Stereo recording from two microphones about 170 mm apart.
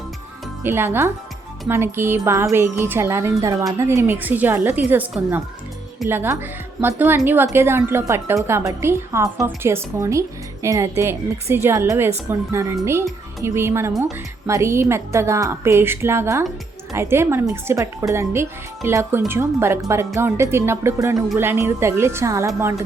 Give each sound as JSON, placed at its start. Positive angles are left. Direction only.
{"t": 0.6, "sound": "a woman's voice", "side_deg": -15}